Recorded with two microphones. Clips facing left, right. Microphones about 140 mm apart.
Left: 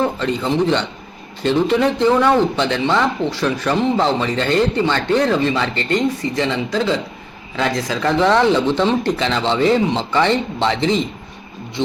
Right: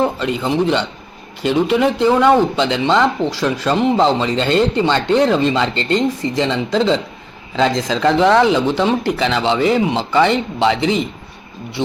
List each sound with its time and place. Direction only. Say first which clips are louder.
0.0 s speech: right 1 dB; 15° right (ahead or behind)
8.3 s speech: right 1 dB; 10° right (ahead or behind)